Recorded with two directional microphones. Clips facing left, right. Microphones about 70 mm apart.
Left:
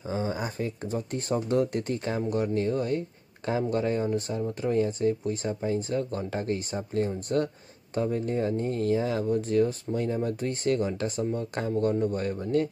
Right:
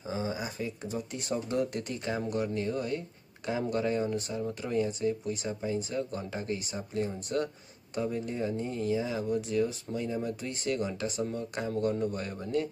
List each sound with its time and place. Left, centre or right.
0.1 s speech: left